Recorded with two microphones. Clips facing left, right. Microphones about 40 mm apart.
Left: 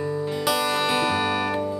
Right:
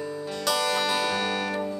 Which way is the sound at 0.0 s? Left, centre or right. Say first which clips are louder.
Left 5 dB; centre.